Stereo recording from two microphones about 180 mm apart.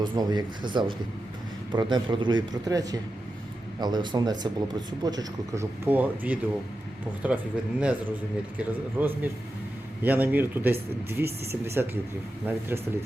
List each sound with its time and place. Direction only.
0.0 s speech: 25° right (ahead or behind)